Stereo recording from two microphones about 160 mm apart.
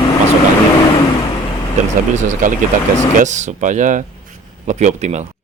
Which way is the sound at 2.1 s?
50° right (ahead or behind).